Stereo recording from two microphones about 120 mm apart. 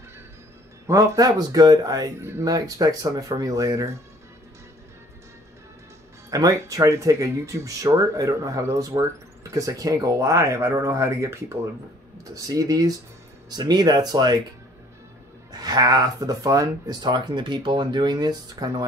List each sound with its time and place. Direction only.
0.8 s speech: 30° right (ahead or behind)
6.3 s speech: 30° right (ahead or behind)
15.5 s speech: 35° right (ahead or behind)